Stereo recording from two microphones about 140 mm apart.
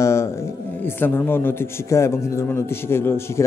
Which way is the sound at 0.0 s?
20° left (ahead or behind).